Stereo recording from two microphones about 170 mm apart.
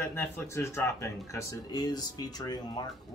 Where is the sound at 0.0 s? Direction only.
15° left (ahead or behind).